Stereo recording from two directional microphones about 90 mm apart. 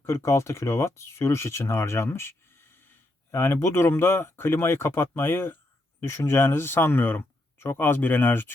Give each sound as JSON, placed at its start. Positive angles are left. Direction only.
{"t": 0.0, "sound": "speech", "side_deg": 30}